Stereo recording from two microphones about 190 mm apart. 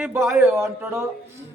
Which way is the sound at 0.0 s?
10° right (ahead or behind).